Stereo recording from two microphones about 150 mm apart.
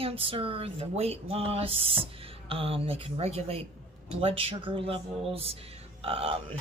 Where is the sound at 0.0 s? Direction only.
40° right (ahead or behind).